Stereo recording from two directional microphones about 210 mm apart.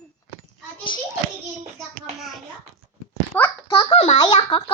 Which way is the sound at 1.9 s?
Centre (ahead or behind).